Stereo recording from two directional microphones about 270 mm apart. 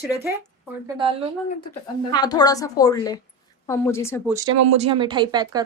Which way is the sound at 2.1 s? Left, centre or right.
Centre.